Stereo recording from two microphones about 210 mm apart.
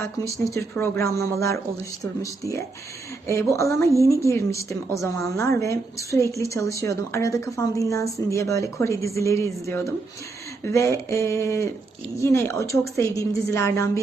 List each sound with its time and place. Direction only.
0.2 s speech: 15° left (ahead or behind)